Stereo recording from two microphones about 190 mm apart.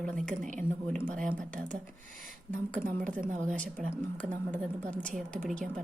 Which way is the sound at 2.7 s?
45° right (ahead or behind).